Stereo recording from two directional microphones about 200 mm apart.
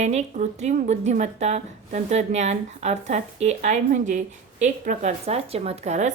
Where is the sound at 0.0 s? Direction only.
35° right (ahead or behind).